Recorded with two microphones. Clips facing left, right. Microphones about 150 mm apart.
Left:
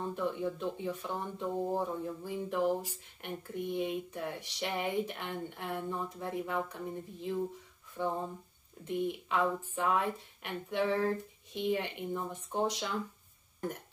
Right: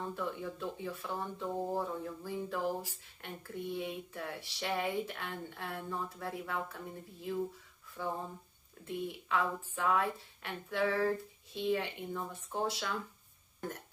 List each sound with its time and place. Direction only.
0.1 s speech: 20° left (ahead or behind)